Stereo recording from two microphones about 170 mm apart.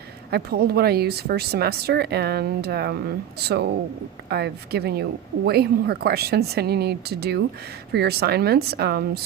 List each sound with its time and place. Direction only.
0.3 s speech: 70° right (ahead or behind)